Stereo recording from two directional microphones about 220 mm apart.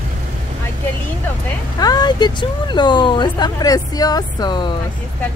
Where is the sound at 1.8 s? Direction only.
20° left (ahead or behind).